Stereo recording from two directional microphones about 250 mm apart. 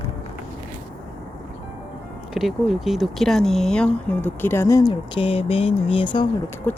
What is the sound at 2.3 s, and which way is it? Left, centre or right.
Speech, centre.